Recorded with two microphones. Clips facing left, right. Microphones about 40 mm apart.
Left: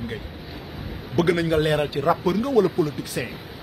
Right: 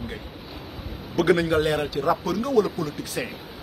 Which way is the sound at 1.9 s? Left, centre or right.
Left.